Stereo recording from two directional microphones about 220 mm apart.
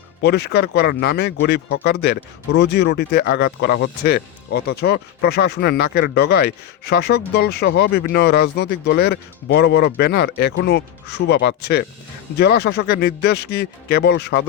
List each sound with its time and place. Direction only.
0.2 s speech: 50° left (ahead or behind)